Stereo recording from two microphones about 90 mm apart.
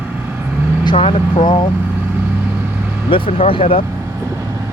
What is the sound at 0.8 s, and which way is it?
Speech, 75° left (ahead or behind).